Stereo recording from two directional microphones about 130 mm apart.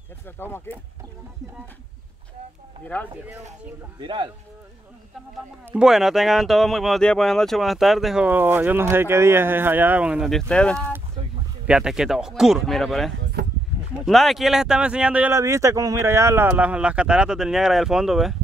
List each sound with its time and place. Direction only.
0.4 s speech: 15° left (ahead or behind)
2.8 s speech: 10° left (ahead or behind)
4.0 s speech: 40° right (ahead or behind)
5.7 s speech: 5° right (ahead or behind)
8.3 s speech: 15° right (ahead or behind); by 10.9 s 10° left (ahead or behind)
11.6 s speech: 5° right (ahead or behind)
15.3 s speech: 25° right (ahead or behind); by 18.3 s 5° right (ahead or behind)